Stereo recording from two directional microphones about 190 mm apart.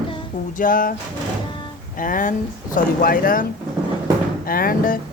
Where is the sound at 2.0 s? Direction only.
45° left (ahead or behind).